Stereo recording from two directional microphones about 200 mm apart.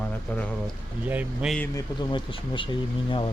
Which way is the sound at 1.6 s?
20° left (ahead or behind).